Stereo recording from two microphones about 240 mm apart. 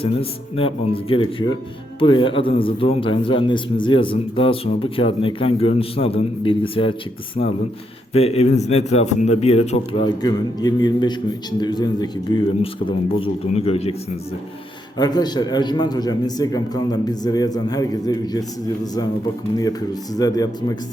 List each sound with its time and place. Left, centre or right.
0.0 s a man's voice: left
8.1 s a man's voice: left
14.9 s a man's voice: centre
19.5 s a man's voice: centre